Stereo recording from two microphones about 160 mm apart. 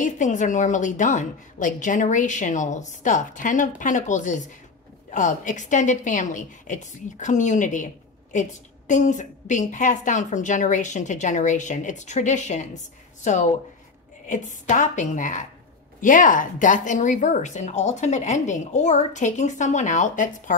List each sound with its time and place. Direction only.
0.0 s a woman's voice: 50° left (ahead or behind)